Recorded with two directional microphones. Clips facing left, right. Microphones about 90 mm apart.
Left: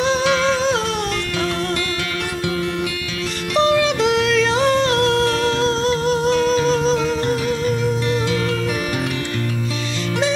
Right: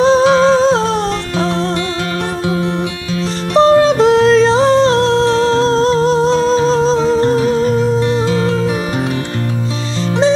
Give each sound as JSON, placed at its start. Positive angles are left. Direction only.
{"t": 0.0, "sound": "humming", "side_deg": -35}
{"t": 3.5, "sound": "music", "side_deg": -35}